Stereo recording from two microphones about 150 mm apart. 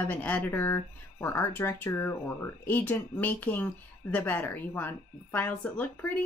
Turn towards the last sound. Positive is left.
turn(degrees=10)  # may be behind; listen again after turning